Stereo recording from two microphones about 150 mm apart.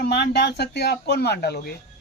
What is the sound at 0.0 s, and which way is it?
Speech, 90° left.